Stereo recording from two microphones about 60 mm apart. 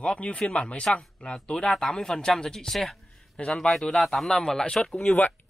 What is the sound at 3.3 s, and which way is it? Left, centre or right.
Speech, centre.